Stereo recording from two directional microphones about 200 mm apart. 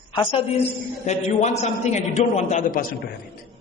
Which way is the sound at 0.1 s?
25° left (ahead or behind).